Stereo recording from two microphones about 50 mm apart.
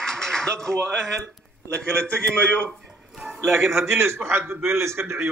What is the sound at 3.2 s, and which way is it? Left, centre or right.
A man's voice, right.